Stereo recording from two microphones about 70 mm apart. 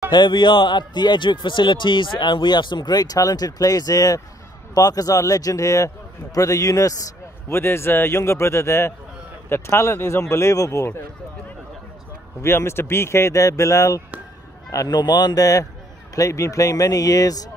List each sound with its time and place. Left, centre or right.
0.1 s speech: left
7.4 s a man's voice: left
12.4 s speech: left
14.9 s a man's voice: left